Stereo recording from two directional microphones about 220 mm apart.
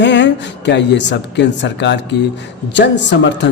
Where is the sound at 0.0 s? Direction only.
55° left (ahead or behind).